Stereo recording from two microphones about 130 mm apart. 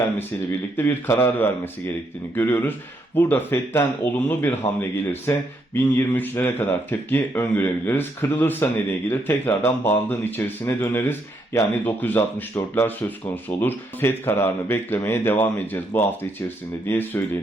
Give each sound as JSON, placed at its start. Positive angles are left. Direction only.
{"t": 0.8, "sound": "speech", "side_deg": 15}
{"t": 16.8, "sound": "speech", "side_deg": 15}